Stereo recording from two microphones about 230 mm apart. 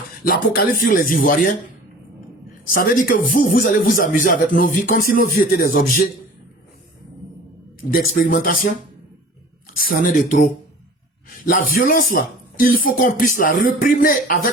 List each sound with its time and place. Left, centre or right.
0.3 s speech: left
7.9 s speech: left
9.7 s speech: left